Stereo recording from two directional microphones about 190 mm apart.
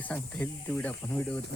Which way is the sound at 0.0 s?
10° left (ahead or behind).